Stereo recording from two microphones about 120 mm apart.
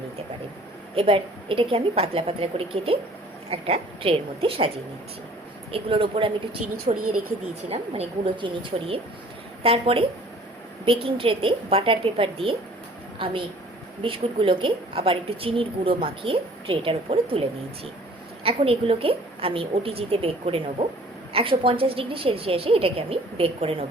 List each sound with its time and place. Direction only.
0.9 s a woman's voice: 50° right (ahead or behind)
5.7 s a woman's voice: 50° right (ahead or behind)
18.4 s a woman's voice: 50° right (ahead or behind)